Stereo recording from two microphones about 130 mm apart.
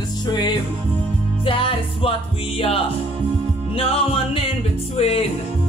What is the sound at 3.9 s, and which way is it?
Music, 50° left (ahead or behind).